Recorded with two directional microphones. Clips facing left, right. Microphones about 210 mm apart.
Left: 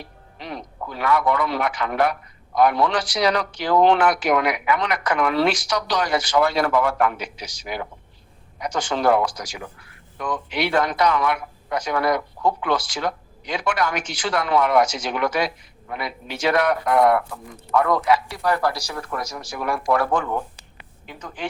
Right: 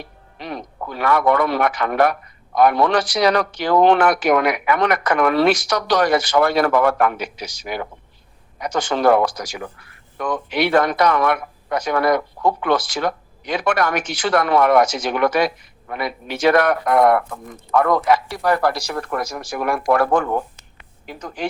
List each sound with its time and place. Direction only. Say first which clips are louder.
0.4 s a woman's voice: right 3 dB; 55° right (ahead or behind)